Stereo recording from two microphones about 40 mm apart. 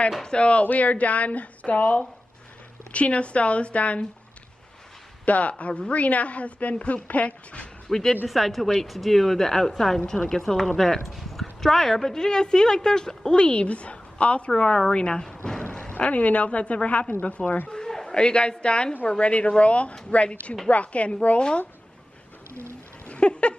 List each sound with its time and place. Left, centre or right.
0.2 s a woman's voice: left
0.7 s a woman's voice: left
5.2 s a woman's voice: left
7.9 s speech: centre
13.5 s a woman's voice: left
14.5 s a woman's voice: centre
16.0 s a woman's voice: left
17.4 s a woman's voice: left
17.8 s a sound: centre
18.1 s a woman's voice: left
23.0 s a sound: left